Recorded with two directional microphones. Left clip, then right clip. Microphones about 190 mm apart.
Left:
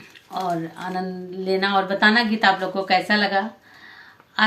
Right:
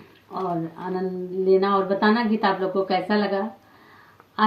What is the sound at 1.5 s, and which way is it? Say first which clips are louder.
Speech: right 3 dB; 5° right (ahead or behind).